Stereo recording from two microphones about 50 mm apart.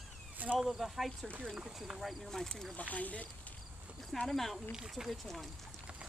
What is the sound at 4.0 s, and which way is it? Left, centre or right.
Speech, centre.